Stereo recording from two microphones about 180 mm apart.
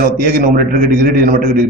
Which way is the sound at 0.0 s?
55° right (ahead or behind).